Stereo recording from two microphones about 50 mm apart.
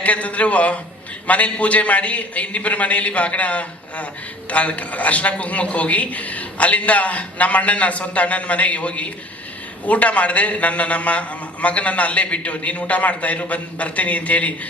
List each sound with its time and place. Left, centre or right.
0.0 s a man's voice: left